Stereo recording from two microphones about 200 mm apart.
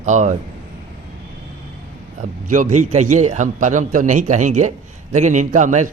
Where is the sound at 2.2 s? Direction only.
40° right (ahead or behind).